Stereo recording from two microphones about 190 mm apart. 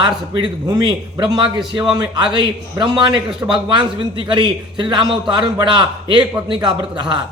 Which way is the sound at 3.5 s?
25° right (ahead or behind).